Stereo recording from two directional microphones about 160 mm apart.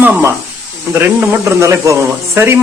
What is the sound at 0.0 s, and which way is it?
Speech, 10° right (ahead or behind).